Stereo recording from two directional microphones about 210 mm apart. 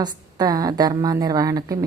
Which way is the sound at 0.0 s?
20° right (ahead or behind).